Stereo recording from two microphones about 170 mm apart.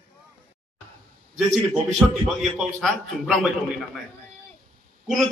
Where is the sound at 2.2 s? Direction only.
Centre (ahead or behind).